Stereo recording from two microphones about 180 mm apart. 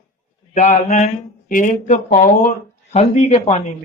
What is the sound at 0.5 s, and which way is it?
A man's voice, 40° left (ahead or behind).